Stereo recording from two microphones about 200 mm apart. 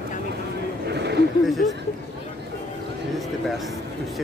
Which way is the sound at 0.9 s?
55° right (ahead or behind).